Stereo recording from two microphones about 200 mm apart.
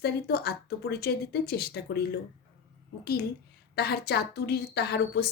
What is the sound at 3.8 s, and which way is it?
Speech, 55° left (ahead or behind).